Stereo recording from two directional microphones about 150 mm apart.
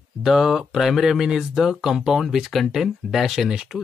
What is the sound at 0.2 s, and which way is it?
Speech, centre (ahead or behind).